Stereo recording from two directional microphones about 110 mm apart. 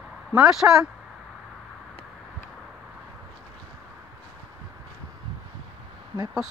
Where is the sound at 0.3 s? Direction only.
5° right (ahead or behind).